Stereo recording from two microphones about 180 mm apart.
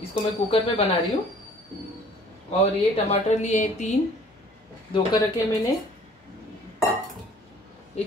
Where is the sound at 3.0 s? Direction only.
40° left (ahead or behind).